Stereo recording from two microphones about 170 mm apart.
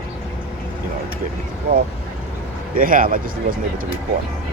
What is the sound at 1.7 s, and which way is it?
Speech, 55° right (ahead or behind).